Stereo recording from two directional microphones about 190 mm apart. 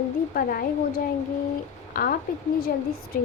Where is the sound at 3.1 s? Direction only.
45° left (ahead or behind).